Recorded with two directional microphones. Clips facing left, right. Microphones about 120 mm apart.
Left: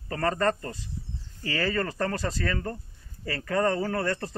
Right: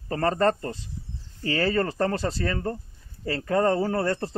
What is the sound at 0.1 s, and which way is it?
Speech, 30° right (ahead or behind).